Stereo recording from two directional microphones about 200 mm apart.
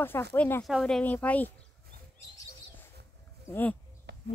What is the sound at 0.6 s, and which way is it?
Speech, centre (ahead or behind).